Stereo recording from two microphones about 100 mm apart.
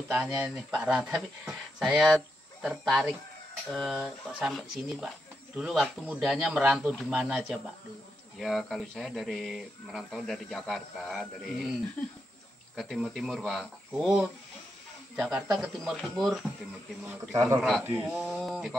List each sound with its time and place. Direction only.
0.1 s speech: 10° right (ahead or behind)
12.7 s speech: 5° left (ahead or behind)
17.3 s a man's voice: 35° right (ahead or behind)
17.8 s speech: 15° right (ahead or behind)
18.2 s speech: 5° left (ahead or behind)